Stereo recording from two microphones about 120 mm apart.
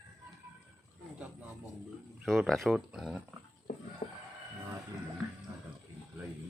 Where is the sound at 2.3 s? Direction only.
Centre (ahead or behind).